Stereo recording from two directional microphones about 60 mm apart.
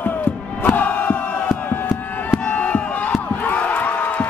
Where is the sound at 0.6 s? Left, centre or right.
Left.